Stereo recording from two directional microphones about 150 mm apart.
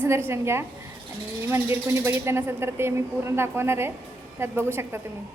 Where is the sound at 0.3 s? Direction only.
15° right (ahead or behind).